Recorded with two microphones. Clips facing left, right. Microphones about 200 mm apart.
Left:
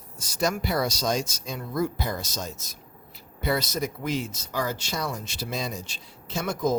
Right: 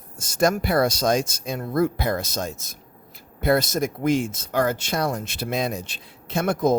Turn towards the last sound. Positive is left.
turn(degrees=-60)  # may be behind; listen again after turning